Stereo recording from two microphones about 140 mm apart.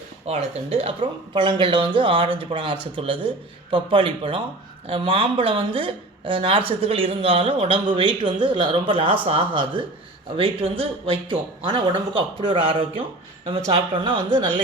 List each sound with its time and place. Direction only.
0.3 s a woman's voice: 45° right (ahead or behind)